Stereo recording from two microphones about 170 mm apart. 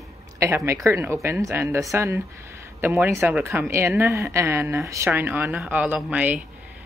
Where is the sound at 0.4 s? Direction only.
15° right (ahead or behind).